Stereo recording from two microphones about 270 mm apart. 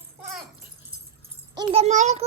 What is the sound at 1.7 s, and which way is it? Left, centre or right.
Speech, right.